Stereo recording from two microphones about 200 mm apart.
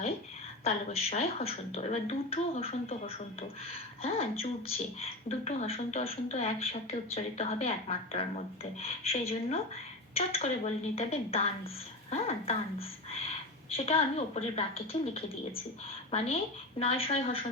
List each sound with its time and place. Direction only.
0.6 s a woman's voice: 35° left (ahead or behind)